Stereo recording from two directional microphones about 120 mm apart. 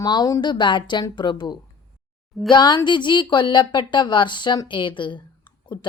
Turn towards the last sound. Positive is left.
turn(degrees=40)  # may be behind; listen again after turning